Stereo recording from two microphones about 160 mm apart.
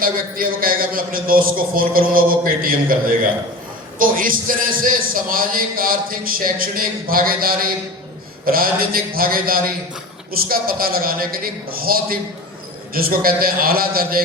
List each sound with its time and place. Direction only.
0.0 s a man's voice: 65° right (ahead or behind)